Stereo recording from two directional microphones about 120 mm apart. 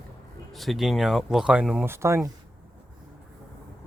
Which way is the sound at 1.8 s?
25° right (ahead or behind).